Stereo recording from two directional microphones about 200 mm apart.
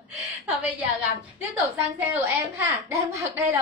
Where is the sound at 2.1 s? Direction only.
10° right (ahead or behind).